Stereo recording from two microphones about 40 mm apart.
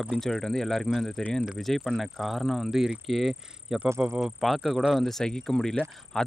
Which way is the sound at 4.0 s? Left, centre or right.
Right.